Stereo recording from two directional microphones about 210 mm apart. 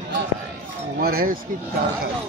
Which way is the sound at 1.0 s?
45° right (ahead or behind).